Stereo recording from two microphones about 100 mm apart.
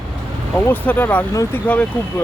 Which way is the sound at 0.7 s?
15° left (ahead or behind).